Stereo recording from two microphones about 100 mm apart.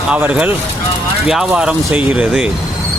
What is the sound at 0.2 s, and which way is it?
Speech, 15° right (ahead or behind).